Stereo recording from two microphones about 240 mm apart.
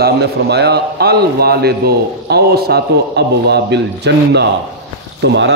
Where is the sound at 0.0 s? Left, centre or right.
Right.